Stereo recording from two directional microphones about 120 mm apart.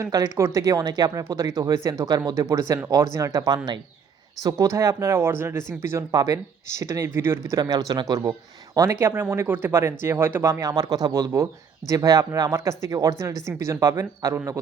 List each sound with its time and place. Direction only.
0.0 s speech: 25° right (ahead or behind)
7.5 s speech: 35° right (ahead or behind)